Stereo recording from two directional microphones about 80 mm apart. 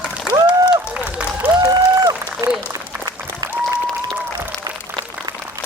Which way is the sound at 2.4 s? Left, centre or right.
Right.